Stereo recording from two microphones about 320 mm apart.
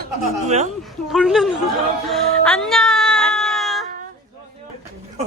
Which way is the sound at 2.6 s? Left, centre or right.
Centre.